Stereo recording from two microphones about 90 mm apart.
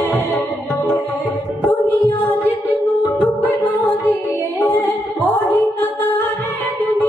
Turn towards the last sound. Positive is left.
turn(degrees=20)  # may be behind; listen again after turning